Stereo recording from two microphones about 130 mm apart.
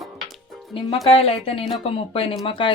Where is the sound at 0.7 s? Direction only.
45° left (ahead or behind).